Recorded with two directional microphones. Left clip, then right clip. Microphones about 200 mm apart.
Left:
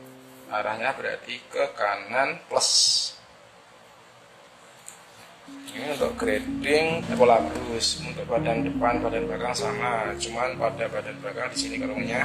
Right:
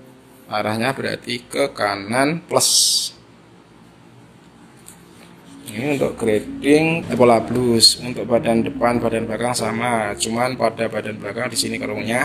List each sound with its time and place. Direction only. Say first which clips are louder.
0.5 s speech: right 5 dB; 55° right (ahead or behind)
5.9 s speech: right 6 dB; 10° right (ahead or behind)
7.2 s speech: right 4 dB; 50° right (ahead or behind)